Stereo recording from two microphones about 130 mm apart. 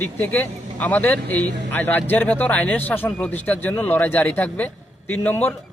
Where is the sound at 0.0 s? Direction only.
15° left (ahead or behind).